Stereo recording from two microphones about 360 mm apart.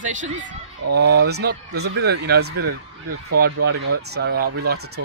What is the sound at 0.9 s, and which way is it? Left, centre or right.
Speech, right.